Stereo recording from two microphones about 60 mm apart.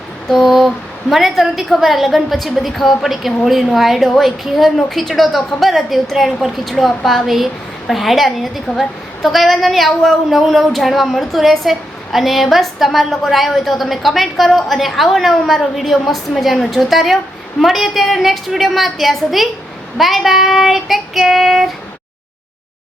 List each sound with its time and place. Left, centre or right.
0.3 s a woman's voice: centre